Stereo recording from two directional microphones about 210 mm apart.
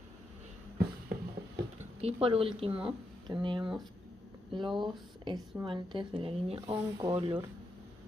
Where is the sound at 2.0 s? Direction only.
30° right (ahead or behind).